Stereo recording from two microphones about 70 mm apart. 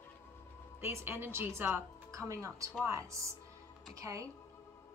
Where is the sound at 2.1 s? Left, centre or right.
Right.